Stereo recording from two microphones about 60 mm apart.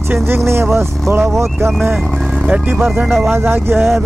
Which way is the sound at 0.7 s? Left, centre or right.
Right.